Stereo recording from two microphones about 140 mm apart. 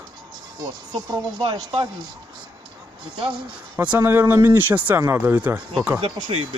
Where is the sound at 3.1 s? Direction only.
35° right (ahead or behind).